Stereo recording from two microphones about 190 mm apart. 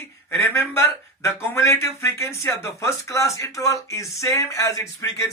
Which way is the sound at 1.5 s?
15° left (ahead or behind).